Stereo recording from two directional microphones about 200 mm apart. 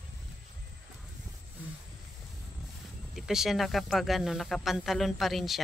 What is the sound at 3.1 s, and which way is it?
Speech, centre (ahead or behind).